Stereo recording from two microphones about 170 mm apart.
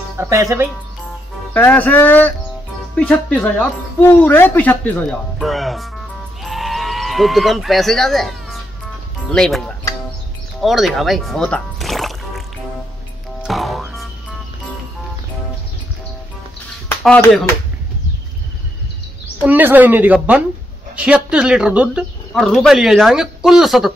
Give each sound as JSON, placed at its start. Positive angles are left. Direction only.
{"t": 0.2, "sound": "speech", "side_deg": -15}
{"t": 1.5, "sound": "speech", "side_deg": 10}
{"t": 6.4, "sound": "sheep", "side_deg": 0}
{"t": 9.3, "sound": "speech", "side_deg": 5}
{"t": 13.4, "sound": "music", "side_deg": 0}
{"t": 19.4, "sound": "speech", "side_deg": -10}